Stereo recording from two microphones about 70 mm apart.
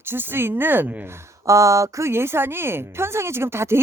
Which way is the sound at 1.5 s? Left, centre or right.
Right.